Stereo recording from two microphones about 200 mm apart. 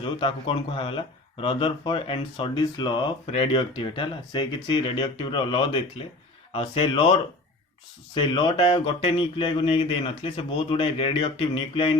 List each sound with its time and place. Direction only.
0.0 s speech: 25° left (ahead or behind)